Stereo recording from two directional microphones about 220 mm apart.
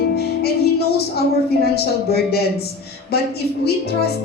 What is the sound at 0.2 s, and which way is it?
Music, 45° left (ahead or behind).